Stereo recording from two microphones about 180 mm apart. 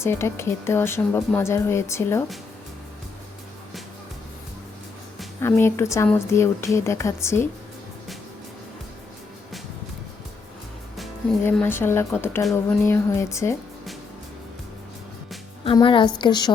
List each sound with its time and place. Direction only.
0.0 s speech: 15° left (ahead or behind)
5.4 s speech: 15° left (ahead or behind)
11.4 s speech: 10° left (ahead or behind)
15.6 s a woman's voice: 30° left (ahead or behind)